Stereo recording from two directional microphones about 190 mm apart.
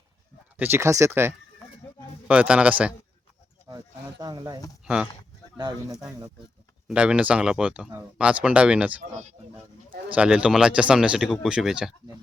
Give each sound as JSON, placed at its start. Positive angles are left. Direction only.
{"t": 0.5, "sound": "speech", "side_deg": -10}
{"t": 4.2, "sound": "speech", "side_deg": -20}
{"t": 4.8, "sound": "speech", "side_deg": -5}
{"t": 6.0, "sound": "speech", "side_deg": -20}
{"t": 6.8, "sound": "speech", "side_deg": -5}
{"t": 10.2, "sound": "speech", "side_deg": -5}